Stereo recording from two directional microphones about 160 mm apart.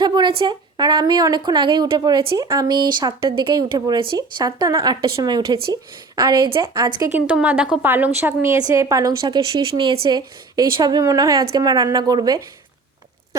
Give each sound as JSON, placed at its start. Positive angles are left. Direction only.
{"t": 0.0, "sound": "a woman's voice", "side_deg": -30}
{"t": 7.3, "sound": "a woman's voice", "side_deg": -10}